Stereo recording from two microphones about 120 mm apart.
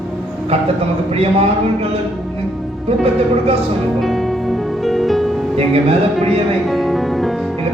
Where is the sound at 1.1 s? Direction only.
55° right (ahead or behind).